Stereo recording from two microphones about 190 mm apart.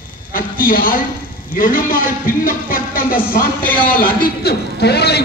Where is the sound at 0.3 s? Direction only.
45° left (ahead or behind).